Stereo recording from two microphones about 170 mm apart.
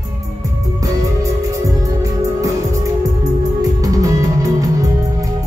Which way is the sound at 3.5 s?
20° right (ahead or behind).